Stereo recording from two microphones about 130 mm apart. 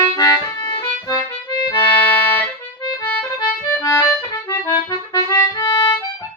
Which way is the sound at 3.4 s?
20° left (ahead or behind).